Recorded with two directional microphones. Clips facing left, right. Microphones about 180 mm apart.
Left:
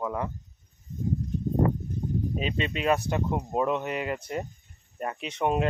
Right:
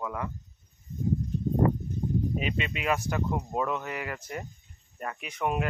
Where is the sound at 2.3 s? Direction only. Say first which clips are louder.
Left 2 dB; 30° left (ahead or behind).